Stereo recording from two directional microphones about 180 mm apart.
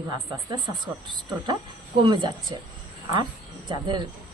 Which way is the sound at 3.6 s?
25° right (ahead or behind).